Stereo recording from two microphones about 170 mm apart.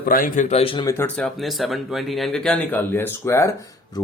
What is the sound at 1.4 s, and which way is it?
Speech, centre (ahead or behind).